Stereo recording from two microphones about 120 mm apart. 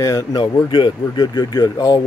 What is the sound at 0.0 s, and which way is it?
Speech, 30° left (ahead or behind).